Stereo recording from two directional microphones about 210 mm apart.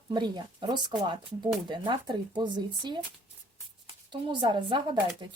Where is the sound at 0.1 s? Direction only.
20° right (ahead or behind).